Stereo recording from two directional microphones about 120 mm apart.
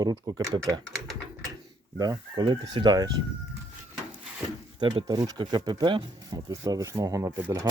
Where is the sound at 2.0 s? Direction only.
35° right (ahead or behind).